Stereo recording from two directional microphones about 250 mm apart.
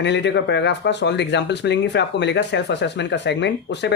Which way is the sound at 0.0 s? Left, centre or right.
Left.